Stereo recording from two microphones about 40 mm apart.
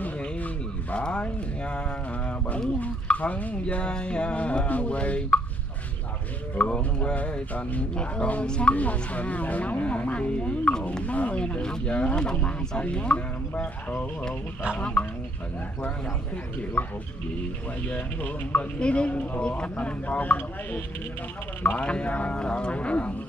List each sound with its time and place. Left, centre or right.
0.9 s speech: left
3.1 s speech: left
3.6 s speech: left
6.5 s speech: left
8.7 s speech: left
11.6 s speech: centre
14.8 s speech: left
16.8 s speech: left
18.8 s speech: left
21.6 s speech: left